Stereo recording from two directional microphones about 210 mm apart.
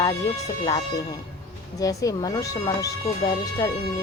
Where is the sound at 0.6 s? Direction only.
15° left (ahead or behind).